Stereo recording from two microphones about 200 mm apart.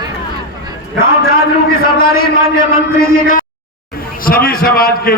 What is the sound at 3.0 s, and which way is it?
A man's voice, 45° left (ahead or behind).